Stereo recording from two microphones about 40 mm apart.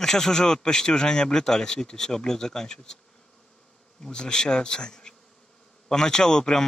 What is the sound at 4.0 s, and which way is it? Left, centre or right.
Bee, centre.